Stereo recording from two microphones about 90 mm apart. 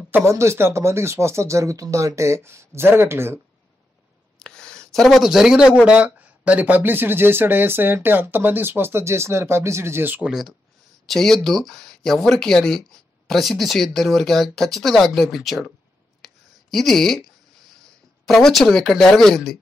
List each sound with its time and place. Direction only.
0.1 s speech: 30° right (ahead or behind)
4.4 s speech: 10° left (ahead or behind); by 10.2 s 25° right (ahead or behind)
10.2 s speech: 5° right (ahead or behind)
16.2 s a sound: centre (ahead or behind)
16.7 s speech: 5° left (ahead or behind)
18.2 s speech: 5° left (ahead or behind)